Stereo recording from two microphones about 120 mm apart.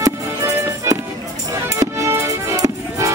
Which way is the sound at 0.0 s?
25° right (ahead or behind).